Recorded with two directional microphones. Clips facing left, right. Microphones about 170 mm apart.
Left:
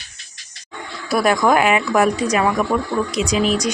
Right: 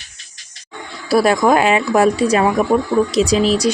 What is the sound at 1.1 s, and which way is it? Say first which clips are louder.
Speech: right 3 dB; 30° right (ahead or behind).